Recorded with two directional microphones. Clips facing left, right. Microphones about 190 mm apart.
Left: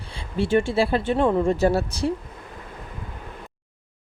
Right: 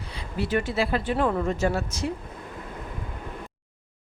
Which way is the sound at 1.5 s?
35° left (ahead or behind).